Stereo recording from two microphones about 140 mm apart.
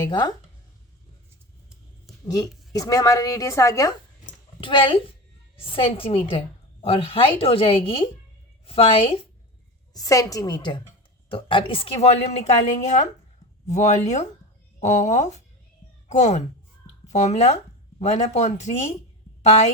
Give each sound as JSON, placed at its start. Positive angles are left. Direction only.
{"t": 0.1, "sound": "speech", "side_deg": 30}
{"t": 2.2, "sound": "a woman's voice", "side_deg": 25}
{"t": 4.6, "sound": "a woman's voice", "side_deg": 40}
{"t": 9.9, "sound": "a woman's voice", "side_deg": 25}